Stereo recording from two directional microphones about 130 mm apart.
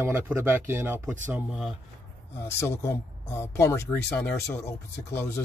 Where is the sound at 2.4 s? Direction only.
20° left (ahead or behind).